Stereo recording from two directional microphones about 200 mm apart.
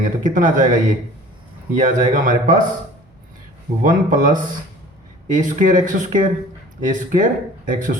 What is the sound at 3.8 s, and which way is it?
Speech, 40° right (ahead or behind).